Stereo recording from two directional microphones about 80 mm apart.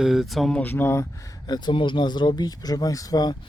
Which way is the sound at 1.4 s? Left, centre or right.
Left.